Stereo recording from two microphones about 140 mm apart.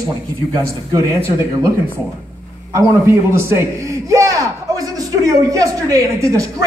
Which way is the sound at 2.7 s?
20° right (ahead or behind).